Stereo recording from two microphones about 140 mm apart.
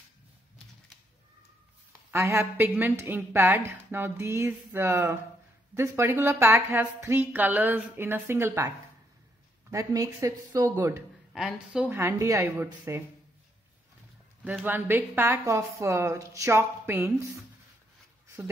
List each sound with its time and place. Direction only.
1.9 s a woman's voice: 20° right (ahead or behind)
11.3 s a woman's voice: 5° right (ahead or behind)
14.4 s a woman's voice: 10° right (ahead or behind)